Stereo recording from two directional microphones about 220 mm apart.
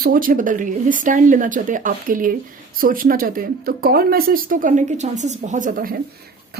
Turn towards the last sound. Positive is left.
turn(degrees=-40)  # may be behind; listen again after turning